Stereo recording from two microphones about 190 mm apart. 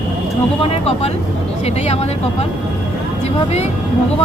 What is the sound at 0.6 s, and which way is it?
Speech, 30° left (ahead or behind).